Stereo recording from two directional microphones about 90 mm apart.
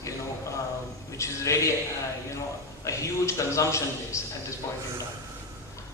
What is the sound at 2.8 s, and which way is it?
A man's voice, 35° left (ahead or behind).